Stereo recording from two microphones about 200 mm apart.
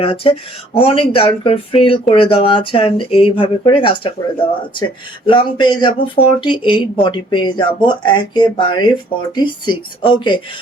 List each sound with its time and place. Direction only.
0.0 s speech: 30° left (ahead or behind)
5.2 s speech: 25° left (ahead or behind)